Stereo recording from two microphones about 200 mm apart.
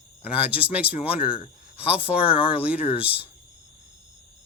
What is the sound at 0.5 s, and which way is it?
Speech, 5° right (ahead or behind).